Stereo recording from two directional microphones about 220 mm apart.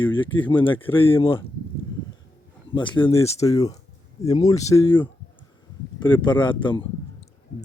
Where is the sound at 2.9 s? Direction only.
20° left (ahead or behind).